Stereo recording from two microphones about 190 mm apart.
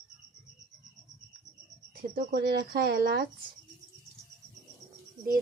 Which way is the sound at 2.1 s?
55° right (ahead or behind).